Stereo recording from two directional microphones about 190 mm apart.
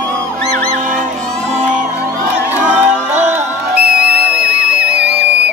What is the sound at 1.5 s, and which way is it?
Music, 40° right (ahead or behind).